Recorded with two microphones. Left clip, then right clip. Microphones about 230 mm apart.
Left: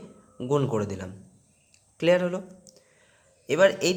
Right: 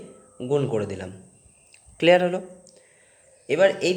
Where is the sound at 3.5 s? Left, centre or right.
Centre.